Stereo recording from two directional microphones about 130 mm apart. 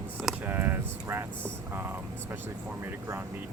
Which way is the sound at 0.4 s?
15° right (ahead or behind).